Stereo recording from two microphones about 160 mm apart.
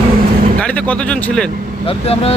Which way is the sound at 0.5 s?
10° left (ahead or behind).